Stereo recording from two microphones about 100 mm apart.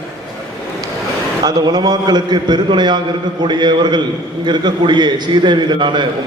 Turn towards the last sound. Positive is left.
turn(degrees=-50)  # may be behind; listen again after turning